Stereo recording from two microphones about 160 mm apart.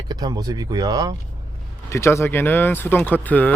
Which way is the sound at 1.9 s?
20° left (ahead or behind).